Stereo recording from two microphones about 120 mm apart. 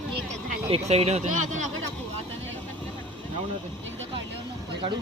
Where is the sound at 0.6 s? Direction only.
55° right (ahead or behind); by 1.7 s 90° right.